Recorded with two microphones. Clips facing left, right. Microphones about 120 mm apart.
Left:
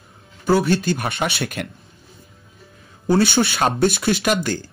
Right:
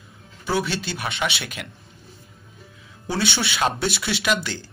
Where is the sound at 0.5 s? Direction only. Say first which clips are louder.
Left 7 dB; 50° left (ahead or behind).